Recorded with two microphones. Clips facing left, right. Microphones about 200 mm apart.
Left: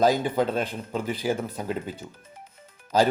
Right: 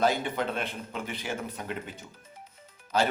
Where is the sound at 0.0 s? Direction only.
35° left (ahead or behind).